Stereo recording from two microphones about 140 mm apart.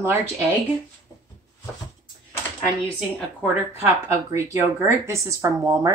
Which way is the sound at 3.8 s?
20° right (ahead or behind).